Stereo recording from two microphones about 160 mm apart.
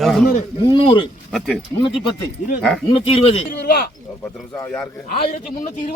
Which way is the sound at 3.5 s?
65° left (ahead or behind).